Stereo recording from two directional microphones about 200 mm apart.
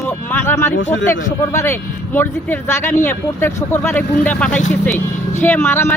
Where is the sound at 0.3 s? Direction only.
10° left (ahead or behind).